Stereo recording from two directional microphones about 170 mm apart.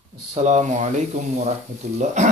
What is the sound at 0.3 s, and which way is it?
Speech, 40° right (ahead or behind).